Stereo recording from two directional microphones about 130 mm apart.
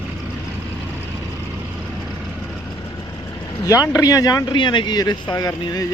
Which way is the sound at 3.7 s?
30° left (ahead or behind).